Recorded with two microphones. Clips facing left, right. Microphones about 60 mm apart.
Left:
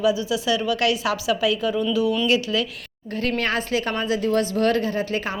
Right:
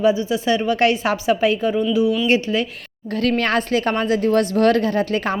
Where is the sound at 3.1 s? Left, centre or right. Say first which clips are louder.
Right 5 dB; right.